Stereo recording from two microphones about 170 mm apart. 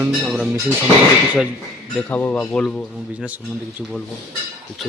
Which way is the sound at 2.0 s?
10° left (ahead or behind).